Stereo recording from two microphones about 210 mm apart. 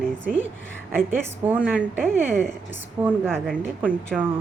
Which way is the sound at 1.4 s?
5° right (ahead or behind).